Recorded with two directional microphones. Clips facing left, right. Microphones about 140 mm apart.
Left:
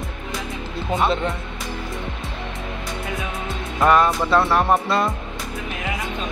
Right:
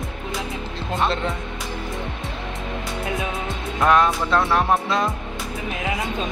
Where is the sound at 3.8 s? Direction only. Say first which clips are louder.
Left 1 dB; centre (ahead or behind).